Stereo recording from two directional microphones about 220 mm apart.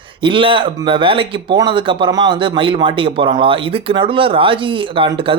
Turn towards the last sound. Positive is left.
turn(degrees=-25)  # may be behind; listen again after turning